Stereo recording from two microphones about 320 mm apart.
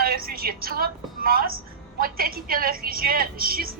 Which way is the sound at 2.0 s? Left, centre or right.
Right.